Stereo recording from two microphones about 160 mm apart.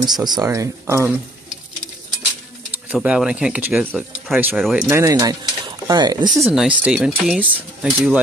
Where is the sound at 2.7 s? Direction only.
10° right (ahead or behind).